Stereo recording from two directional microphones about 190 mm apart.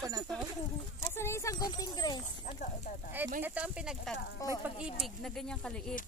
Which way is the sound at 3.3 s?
10° right (ahead or behind).